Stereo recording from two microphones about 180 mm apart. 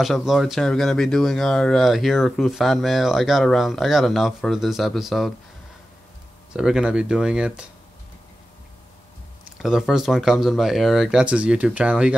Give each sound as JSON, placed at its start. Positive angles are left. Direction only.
{"t": 0.0, "sound": "speech", "side_deg": 0}
{"t": 6.5, "sound": "speech", "side_deg": -5}
{"t": 9.6, "sound": "speech", "side_deg": 0}